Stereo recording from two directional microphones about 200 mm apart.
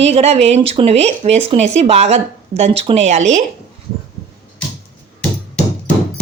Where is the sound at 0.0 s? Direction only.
30° right (ahead or behind).